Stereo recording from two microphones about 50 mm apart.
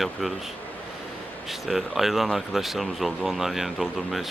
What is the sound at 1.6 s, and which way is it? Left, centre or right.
Speech, centre.